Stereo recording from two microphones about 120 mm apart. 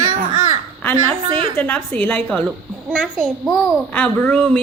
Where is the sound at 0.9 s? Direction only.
45° right (ahead or behind).